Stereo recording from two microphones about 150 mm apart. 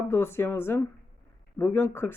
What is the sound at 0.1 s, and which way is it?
Speech, 15° left (ahead or behind).